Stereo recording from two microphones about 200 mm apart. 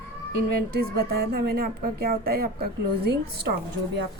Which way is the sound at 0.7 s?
50° right (ahead or behind).